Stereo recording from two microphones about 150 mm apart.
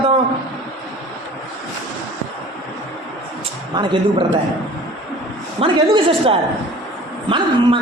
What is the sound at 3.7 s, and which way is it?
Speech, 30° right (ahead or behind).